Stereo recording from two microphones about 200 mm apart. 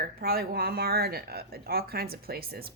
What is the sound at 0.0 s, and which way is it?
A woman's voice, 50° right (ahead or behind).